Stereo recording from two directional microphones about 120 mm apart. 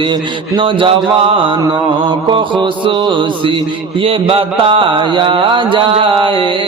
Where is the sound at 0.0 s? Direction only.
45° right (ahead or behind).